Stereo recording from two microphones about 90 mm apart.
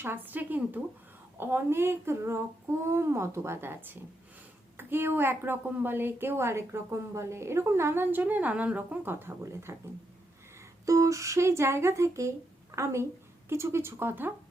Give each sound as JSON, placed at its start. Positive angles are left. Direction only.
{"t": 0.0, "sound": "a woman's voice", "side_deg": -25}
{"t": 10.8, "sound": "a woman's voice", "side_deg": -35}